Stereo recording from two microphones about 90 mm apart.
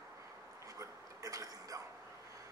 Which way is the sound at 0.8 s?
40° right (ahead or behind).